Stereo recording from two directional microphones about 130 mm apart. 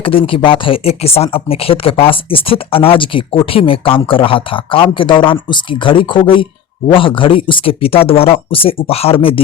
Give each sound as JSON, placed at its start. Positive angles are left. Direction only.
{"t": 0.0, "sound": "speech", "side_deg": 45}